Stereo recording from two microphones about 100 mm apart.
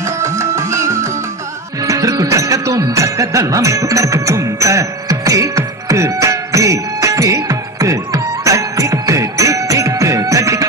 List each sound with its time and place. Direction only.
0.0 s music: 25° right (ahead or behind)